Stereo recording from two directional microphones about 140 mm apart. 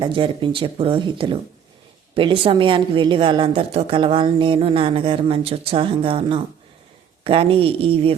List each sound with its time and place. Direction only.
0.0 s a woman's voice: 35° right (ahead or behind)